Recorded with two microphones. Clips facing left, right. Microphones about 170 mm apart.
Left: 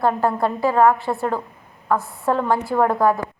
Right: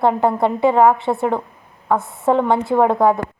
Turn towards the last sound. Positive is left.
turn(degrees=-20)  # may be behind; listen again after turning